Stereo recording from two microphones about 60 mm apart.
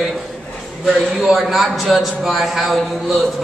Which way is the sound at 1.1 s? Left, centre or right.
Centre.